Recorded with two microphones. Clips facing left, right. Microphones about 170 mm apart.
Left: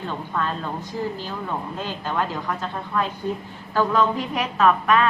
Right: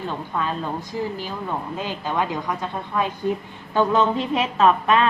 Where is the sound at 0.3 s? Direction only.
10° right (ahead or behind).